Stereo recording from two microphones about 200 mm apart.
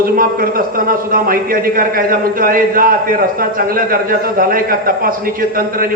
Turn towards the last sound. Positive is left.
turn(degrees=-45)  # may be behind; listen again after turning